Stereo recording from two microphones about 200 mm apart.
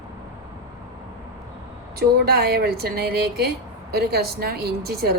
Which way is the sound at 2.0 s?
55° right (ahead or behind).